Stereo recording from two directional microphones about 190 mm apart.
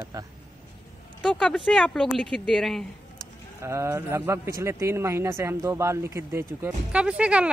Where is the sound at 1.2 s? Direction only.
5° left (ahead or behind).